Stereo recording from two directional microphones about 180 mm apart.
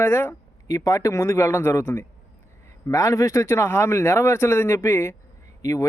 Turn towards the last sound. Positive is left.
turn(degrees=20)  # may be behind; listen again after turning